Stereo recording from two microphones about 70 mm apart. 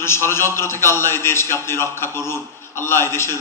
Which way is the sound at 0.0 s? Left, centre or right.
Left.